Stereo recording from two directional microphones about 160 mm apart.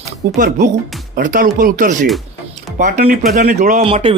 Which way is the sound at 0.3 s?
55° right (ahead or behind).